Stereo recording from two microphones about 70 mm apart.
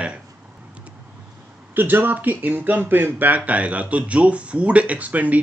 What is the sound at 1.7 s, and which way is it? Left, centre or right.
Speech, right.